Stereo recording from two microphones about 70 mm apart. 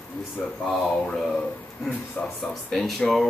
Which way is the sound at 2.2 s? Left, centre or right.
Centre.